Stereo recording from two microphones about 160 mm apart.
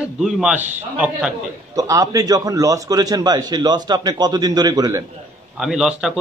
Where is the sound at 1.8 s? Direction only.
20° right (ahead or behind).